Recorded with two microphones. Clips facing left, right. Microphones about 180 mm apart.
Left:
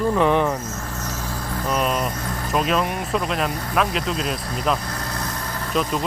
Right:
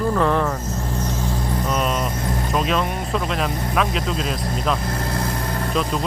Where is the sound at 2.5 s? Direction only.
Centre (ahead or behind).